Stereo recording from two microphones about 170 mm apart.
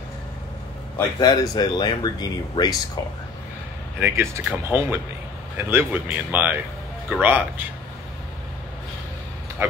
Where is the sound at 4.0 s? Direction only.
15° right (ahead or behind).